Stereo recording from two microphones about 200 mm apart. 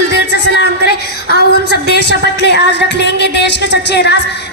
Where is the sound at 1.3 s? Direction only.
55° left (ahead or behind).